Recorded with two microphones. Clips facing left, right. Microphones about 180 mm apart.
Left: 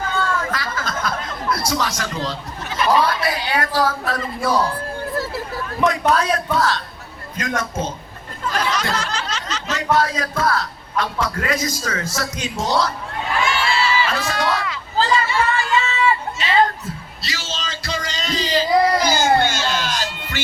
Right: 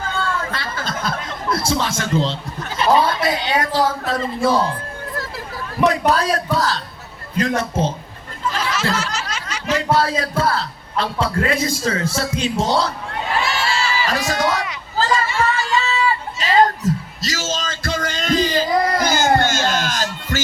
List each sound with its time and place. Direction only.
0.5 s a sound: 30° right (ahead or behind)
2.7 s a man's voice: 25° right (ahead or behind)
5.8 s a man's voice: 35° right (ahead or behind)
8.7 s a sound: 5° right (ahead or behind)
9.3 s snicker: 10° right (ahead or behind)
9.7 s a man's voice: 30° right (ahead or behind)
13.4 s crowd: 40° right (ahead or behind)
14.2 s speech: 20° right (ahead or behind)
15.0 s chatter: 45° right (ahead or behind)
16.8 s a sound: 40° right (ahead or behind)